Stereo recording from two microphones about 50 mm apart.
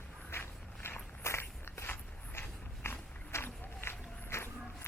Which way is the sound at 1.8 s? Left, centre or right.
Left.